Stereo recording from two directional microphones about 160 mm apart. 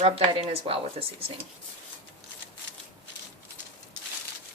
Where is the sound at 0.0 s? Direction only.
40° right (ahead or behind).